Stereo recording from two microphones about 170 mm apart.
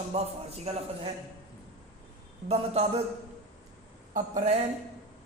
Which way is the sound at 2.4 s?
40° right (ahead or behind).